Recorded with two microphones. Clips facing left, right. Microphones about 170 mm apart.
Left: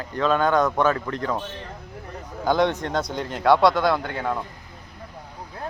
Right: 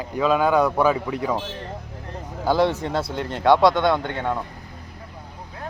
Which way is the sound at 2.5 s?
5° right (ahead or behind).